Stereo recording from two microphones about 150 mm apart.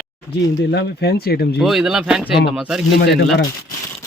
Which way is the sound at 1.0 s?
90° left.